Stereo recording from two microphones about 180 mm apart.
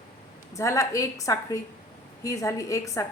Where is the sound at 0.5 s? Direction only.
15° left (ahead or behind).